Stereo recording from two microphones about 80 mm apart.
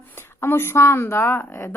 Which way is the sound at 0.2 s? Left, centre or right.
Left.